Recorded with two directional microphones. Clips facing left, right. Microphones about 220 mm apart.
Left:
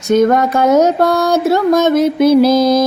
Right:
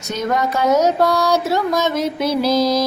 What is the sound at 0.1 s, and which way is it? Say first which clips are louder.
Music: left 9 dB; 50° left (ahead or behind).